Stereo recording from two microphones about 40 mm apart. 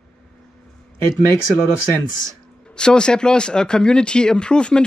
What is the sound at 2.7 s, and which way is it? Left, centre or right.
Speech, left.